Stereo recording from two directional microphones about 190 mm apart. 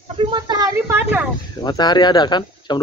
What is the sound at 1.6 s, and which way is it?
Speech, 20° left (ahead or behind).